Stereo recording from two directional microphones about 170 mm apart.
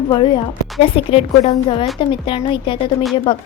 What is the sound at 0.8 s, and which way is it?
Speech, 35° left (ahead or behind).